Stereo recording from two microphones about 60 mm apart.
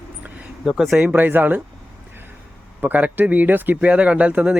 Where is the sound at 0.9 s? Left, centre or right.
Centre.